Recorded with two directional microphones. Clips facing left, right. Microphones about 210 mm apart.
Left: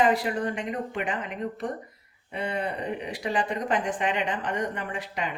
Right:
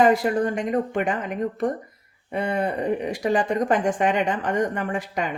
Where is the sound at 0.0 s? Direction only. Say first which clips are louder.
Right 5 dB; 45° right (ahead or behind).